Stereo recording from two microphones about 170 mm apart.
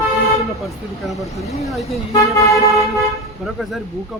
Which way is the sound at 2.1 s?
20° left (ahead or behind).